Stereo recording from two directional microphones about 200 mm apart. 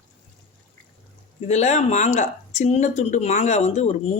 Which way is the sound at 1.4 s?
35° left (ahead or behind).